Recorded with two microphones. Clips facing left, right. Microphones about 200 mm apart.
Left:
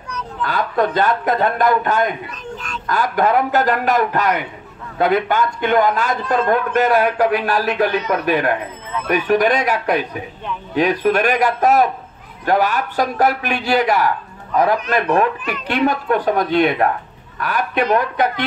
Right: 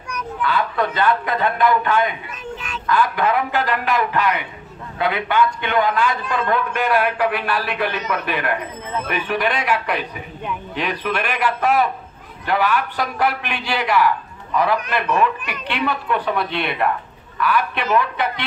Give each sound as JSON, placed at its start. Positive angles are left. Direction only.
{"t": 0.4, "sound": "a man's voice", "side_deg": 45}